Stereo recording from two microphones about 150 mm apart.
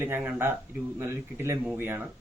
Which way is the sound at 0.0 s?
15° right (ahead or behind).